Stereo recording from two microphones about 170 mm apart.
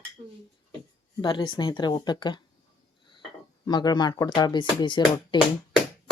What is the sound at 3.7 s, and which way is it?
Speech, 25° left (ahead or behind).